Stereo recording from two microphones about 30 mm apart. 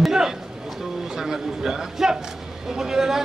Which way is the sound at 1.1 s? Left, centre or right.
Centre.